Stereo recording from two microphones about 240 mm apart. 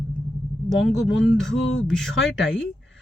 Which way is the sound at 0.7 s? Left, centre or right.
Centre.